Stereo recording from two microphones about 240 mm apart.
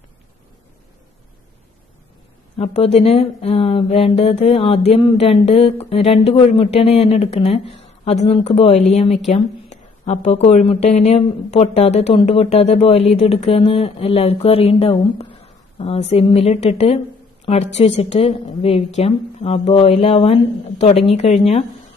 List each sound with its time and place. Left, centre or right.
2.5 s speech: left